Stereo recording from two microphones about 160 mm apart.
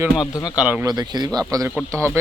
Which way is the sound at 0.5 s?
10° right (ahead or behind).